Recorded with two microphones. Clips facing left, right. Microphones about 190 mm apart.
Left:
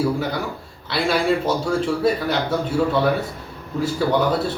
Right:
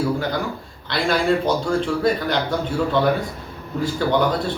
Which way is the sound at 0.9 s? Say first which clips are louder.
Even; 5° left (ahead or behind).